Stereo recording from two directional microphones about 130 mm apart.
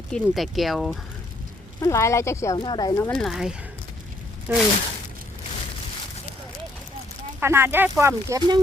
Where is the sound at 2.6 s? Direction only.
35° left (ahead or behind).